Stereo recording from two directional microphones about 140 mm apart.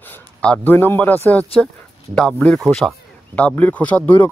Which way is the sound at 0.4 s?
10° left (ahead or behind).